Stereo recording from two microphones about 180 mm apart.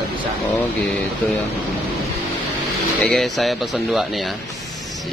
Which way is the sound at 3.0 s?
5° left (ahead or behind).